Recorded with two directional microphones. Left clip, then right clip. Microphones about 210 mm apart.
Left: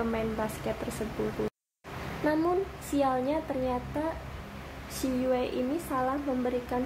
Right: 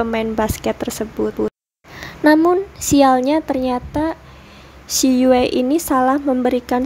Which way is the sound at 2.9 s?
50° right (ahead or behind).